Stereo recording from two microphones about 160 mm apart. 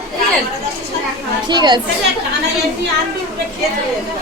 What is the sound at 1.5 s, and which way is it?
Speech, 25° right (ahead or behind).